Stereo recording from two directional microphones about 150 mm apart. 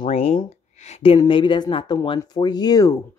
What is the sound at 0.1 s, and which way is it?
A woman's voice, 40° left (ahead or behind).